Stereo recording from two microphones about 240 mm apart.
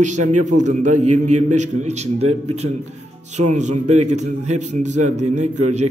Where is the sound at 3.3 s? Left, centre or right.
Right.